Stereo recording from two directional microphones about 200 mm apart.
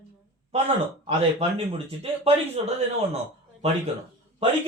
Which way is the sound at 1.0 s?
30° right (ahead or behind).